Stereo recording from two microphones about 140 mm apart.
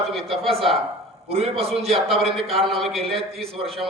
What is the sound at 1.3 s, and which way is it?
Speech, 45° right (ahead or behind).